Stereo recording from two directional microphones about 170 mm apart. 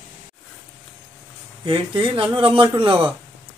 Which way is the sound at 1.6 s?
30° right (ahead or behind).